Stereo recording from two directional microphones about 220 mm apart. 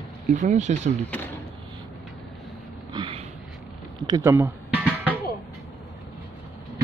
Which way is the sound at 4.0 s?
15° right (ahead or behind).